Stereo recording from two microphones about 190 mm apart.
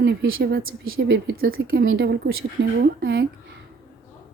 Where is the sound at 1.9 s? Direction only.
70° right (ahead or behind).